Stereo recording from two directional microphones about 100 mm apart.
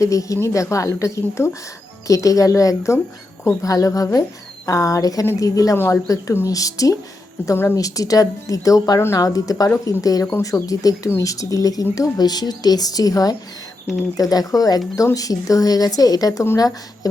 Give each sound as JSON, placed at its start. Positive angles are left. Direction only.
{"t": 0.0, "sound": "speech", "side_deg": 35}
{"t": 5.7, "sound": "speech", "side_deg": 25}